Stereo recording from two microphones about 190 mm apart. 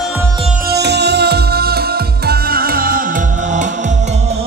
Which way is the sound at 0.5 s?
55° right (ahead or behind).